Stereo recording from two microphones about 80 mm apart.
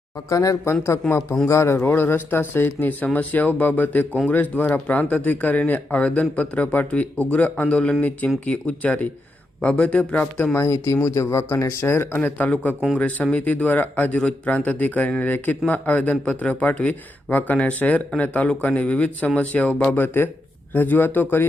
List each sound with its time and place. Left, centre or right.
0.3 s a man's voice: left